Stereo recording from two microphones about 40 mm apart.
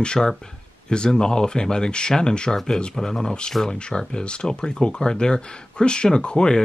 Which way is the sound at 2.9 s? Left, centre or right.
Centre.